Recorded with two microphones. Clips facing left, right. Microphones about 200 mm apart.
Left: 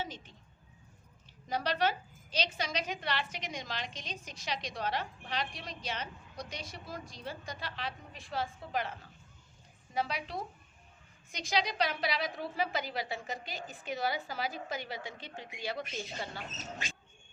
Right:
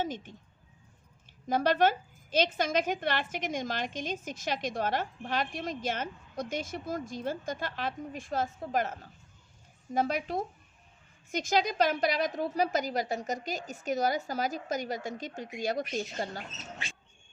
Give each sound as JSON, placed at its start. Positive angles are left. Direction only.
{"t": 0.0, "sound": "a woman's voice", "side_deg": -50}
{"t": 1.5, "sound": "a woman's voice", "side_deg": -50}